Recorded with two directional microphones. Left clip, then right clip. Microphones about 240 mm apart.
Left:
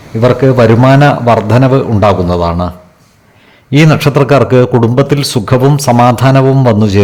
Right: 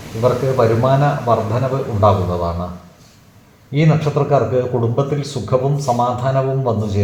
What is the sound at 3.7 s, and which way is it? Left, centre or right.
A man's voice, left.